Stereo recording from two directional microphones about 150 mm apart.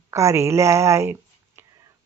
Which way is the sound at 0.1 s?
20° right (ahead or behind).